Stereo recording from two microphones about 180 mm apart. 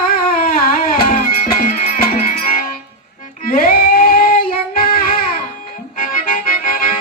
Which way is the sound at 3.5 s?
55° left (ahead or behind).